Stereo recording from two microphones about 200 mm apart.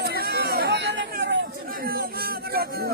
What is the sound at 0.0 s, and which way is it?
Chatter, 50° right (ahead or behind).